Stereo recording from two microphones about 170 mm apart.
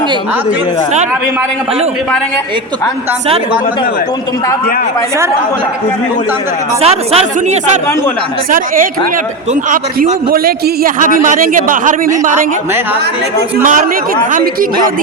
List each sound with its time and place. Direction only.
6.8 s speech: 35° right (ahead or behind)
8.4 s speech: 55° right (ahead or behind)